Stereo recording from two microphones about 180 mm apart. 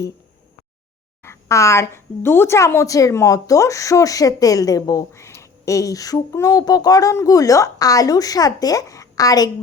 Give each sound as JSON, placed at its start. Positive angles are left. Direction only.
{"t": 1.2, "sound": "a woman's voice", "side_deg": 15}